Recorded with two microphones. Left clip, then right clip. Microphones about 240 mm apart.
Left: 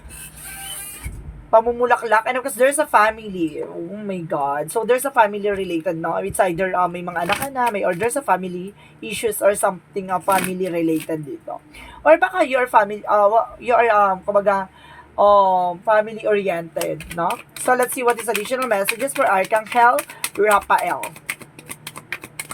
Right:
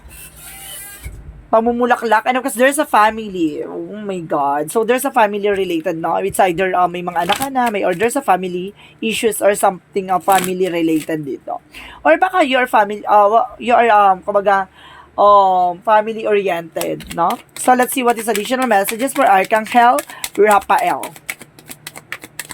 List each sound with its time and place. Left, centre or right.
1.5 s speech: right
17.7 s speech: right